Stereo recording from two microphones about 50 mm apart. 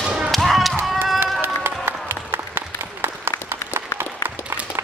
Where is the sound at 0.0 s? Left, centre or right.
Centre.